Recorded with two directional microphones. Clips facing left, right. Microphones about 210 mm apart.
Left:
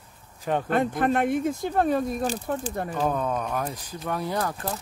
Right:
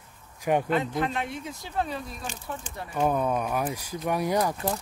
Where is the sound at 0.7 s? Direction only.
50° left (ahead or behind).